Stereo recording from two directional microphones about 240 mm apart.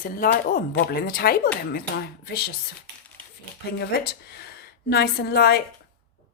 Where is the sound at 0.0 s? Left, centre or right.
Left.